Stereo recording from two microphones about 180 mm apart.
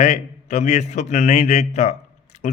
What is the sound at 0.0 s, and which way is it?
A man's voice, 40° left (ahead or behind).